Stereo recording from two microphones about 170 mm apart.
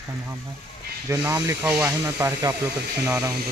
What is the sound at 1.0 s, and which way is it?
Speech, 15° right (ahead or behind).